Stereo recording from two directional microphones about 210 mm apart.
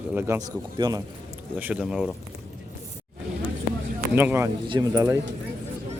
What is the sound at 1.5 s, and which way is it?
Speech, 10° right (ahead or behind).